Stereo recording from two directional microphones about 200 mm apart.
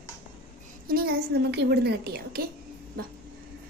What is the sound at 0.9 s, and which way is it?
A woman's voice, 55° right (ahead or behind).